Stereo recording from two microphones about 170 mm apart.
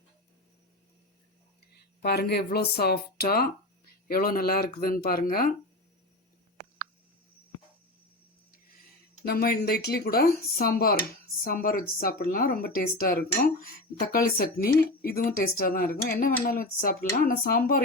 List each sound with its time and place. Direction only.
2.0 s speech: 70° left (ahead or behind)
9.2 s speech: 65° left (ahead or behind)